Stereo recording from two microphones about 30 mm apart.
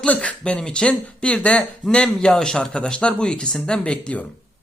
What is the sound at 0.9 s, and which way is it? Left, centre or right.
Speech, left.